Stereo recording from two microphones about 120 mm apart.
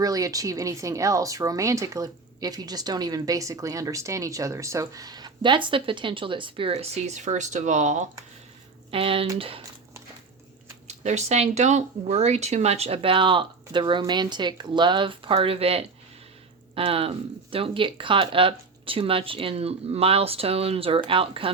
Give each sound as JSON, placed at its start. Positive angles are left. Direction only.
{"t": 0.0, "sound": "speech", "side_deg": -30}
{"t": 8.9, "sound": "speech", "side_deg": -50}
{"t": 10.8, "sound": "speech", "side_deg": -70}